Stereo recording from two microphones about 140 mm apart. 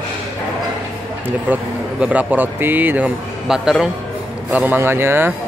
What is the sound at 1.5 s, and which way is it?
Speech, 10° right (ahead or behind).